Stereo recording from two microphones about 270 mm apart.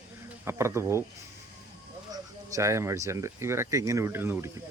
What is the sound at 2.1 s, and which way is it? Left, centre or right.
Speech, centre.